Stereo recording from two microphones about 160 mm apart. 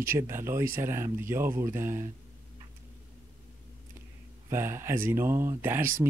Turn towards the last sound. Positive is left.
turn(degrees=-15)  # may be behind; listen again after turning